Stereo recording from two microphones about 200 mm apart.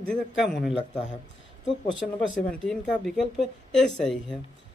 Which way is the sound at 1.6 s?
65° left (ahead or behind).